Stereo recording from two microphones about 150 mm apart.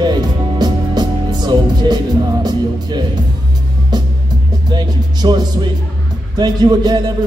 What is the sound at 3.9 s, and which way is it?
Music, 30° right (ahead or behind).